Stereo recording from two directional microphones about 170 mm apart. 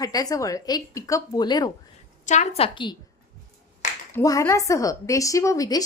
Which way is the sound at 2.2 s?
45° left (ahead or behind).